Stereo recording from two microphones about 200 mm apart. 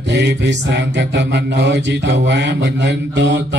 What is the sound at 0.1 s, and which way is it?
Mantra, 60° right (ahead or behind).